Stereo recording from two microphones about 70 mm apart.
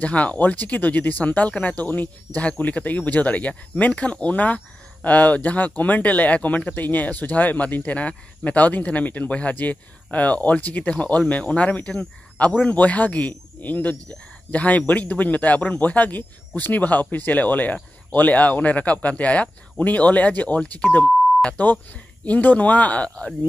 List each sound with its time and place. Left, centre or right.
0.0 s speech: centre